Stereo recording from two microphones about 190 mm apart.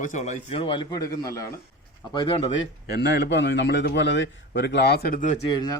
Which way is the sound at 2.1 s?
25° left (ahead or behind).